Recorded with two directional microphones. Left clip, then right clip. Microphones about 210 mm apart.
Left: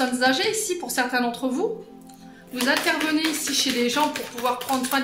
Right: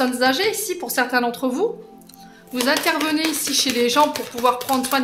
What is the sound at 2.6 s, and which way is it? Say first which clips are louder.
Speech: right 2 dB; 50° right (ahead or behind).